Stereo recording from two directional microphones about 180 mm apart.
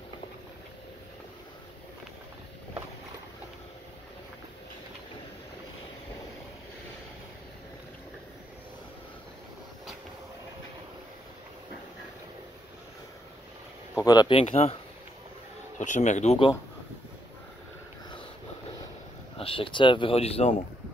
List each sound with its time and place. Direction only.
14.0 s speech: 25° left (ahead or behind)
15.8 s speech: 40° left (ahead or behind)
19.3 s speech: 30° left (ahead or behind)